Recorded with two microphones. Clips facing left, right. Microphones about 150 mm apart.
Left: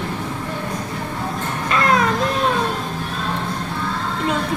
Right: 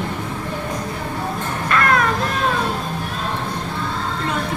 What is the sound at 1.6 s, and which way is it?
Music, 20° left (ahead or behind).